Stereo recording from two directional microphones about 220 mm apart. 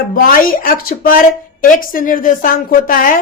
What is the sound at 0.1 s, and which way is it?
A woman's voice, 40° left (ahead or behind).